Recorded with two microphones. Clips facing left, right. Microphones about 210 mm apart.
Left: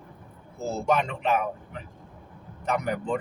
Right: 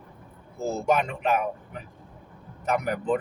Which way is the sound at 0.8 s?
10° right (ahead or behind).